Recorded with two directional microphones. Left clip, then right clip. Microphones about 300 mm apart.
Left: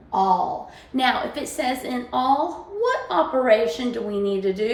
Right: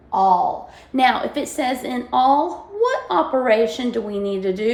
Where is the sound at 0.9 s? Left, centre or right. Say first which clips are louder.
Right 4 dB; right.